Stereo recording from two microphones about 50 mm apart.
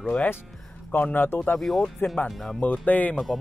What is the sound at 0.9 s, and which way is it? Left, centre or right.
Speech, left.